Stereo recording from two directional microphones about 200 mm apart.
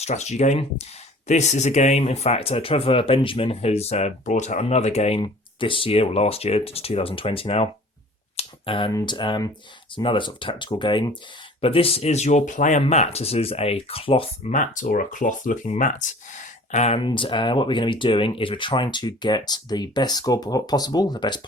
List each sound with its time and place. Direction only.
0.0 s speech: 35° left (ahead or behind)
8.4 s a sound: 25° left (ahead or behind)
8.9 s speech: 20° left (ahead or behind)
14.5 s speech: 40° left (ahead or behind); by 21.4 s 20° left (ahead or behind)